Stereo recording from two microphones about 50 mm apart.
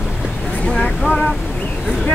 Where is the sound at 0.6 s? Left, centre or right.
Centre.